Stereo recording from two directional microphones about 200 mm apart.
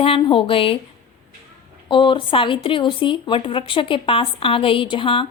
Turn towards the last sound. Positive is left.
turn(degrees=25)  # may be behind; listen again after turning